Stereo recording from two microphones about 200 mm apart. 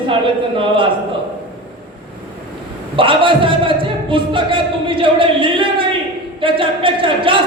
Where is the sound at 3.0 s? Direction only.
25° right (ahead or behind).